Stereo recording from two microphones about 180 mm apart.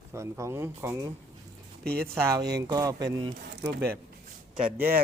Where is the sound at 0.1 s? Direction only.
15° right (ahead or behind).